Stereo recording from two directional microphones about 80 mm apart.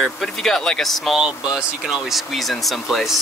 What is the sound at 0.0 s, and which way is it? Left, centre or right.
Speech, centre.